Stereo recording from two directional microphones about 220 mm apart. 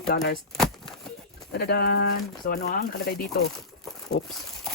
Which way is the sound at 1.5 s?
45° left (ahead or behind).